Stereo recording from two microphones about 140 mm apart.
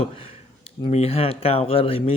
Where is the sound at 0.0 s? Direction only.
45° left (ahead or behind).